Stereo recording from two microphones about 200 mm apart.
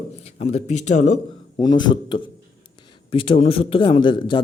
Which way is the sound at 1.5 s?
20° left (ahead or behind).